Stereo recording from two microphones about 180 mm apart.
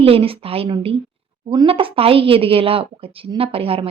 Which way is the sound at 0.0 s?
30° right (ahead or behind).